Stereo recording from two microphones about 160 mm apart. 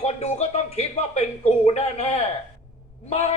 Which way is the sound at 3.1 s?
40° left (ahead or behind).